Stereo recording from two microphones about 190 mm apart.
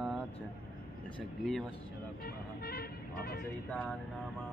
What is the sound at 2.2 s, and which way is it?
Speech, 55° left (ahead or behind).